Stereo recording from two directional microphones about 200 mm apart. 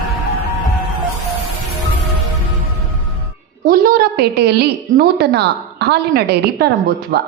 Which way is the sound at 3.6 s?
45° right (ahead or behind).